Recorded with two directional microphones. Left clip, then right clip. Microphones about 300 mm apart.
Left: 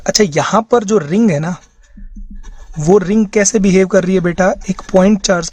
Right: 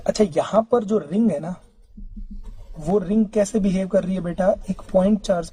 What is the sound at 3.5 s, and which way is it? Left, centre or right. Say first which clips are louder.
Speech: left 10 dB; left.